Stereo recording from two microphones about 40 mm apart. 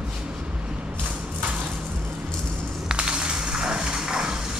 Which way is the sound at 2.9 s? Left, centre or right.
Right.